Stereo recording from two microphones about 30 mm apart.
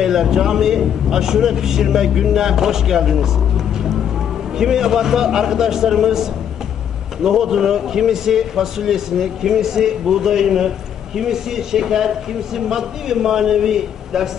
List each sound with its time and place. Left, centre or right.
0.0 s a man's voice: centre
7.2 s a man's voice: centre